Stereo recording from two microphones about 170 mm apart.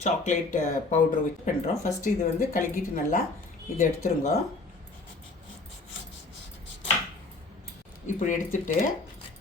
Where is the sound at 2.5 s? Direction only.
50° left (ahead or behind).